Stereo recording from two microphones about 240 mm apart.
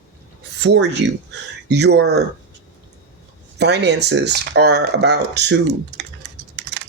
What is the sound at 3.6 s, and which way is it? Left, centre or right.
Speech, right.